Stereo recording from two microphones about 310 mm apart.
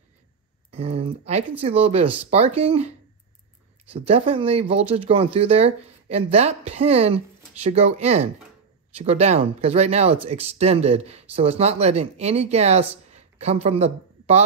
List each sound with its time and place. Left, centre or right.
0.7 s speech: centre
3.9 s speech: centre